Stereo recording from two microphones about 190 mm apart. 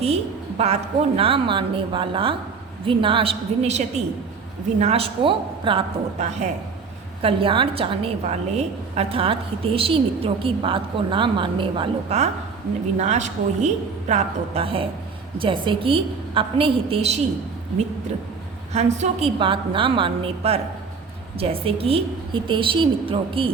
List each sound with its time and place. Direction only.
0.6 s a woman's voice: 30° right (ahead or behind)
18.7 s a woman's voice: 35° right (ahead or behind)